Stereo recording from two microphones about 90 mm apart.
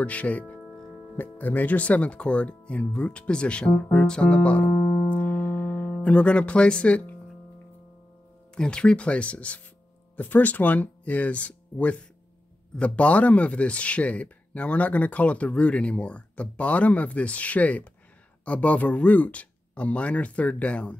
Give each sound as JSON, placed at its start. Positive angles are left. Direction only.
{"t": 0.0, "sound": "speech", "side_deg": 15}
{"t": 4.7, "sound": "music", "side_deg": 35}
{"t": 5.1, "sound": "music", "side_deg": 20}
{"t": 8.5, "sound": "speech", "side_deg": 10}